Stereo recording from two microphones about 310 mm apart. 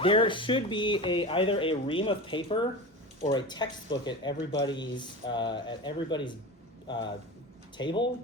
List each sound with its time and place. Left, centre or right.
0.0 s speech: centre